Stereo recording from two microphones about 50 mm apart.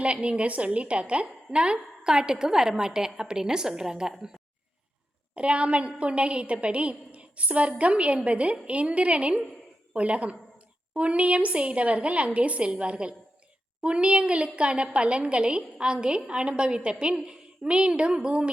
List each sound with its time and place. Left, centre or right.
0.0 s a woman's voice: right
5.3 s a woman's voice: right